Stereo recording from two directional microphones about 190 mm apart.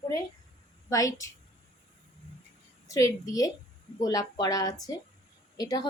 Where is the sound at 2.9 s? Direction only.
15° left (ahead or behind).